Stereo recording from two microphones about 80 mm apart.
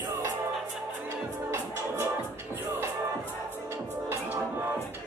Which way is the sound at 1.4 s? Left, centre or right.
Right.